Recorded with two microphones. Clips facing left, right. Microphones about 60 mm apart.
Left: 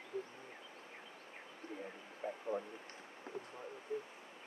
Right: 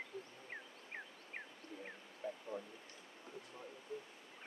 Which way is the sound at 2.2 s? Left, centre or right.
Left.